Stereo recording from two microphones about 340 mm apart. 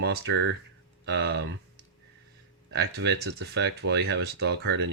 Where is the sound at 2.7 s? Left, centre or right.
Right.